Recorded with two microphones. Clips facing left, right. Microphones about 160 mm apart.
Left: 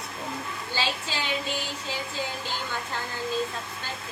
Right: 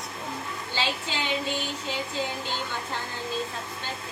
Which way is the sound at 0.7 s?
20° right (ahead or behind).